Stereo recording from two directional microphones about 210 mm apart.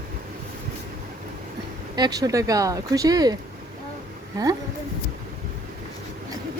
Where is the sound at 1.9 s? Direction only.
20° right (ahead or behind).